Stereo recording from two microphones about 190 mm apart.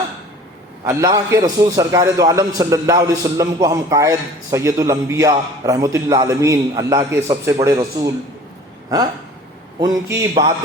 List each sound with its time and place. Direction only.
0.9 s a man's voice: 15° right (ahead or behind)
9.8 s a man's voice: 15° right (ahead or behind)